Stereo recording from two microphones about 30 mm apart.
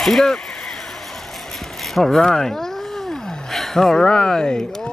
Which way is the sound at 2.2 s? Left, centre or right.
Centre.